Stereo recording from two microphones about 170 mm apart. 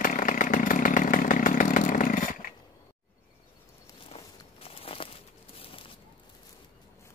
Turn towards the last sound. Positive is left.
turn(degrees=35)  # may be behind; listen again after turning